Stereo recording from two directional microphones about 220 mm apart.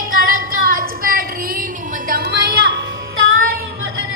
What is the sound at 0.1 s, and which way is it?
Music, 40° right (ahead or behind).